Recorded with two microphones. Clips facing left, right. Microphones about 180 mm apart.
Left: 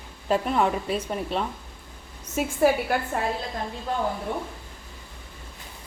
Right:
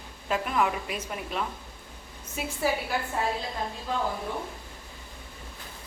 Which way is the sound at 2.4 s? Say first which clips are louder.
Left 7 dB; 45° left (ahead or behind).